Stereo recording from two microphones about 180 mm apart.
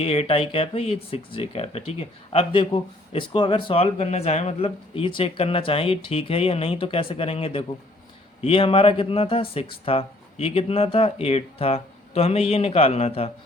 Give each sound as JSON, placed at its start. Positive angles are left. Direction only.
{"t": 0.0, "sound": "speech", "side_deg": 35}